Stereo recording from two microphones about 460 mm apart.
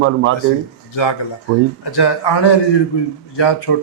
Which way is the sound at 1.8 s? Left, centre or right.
Left.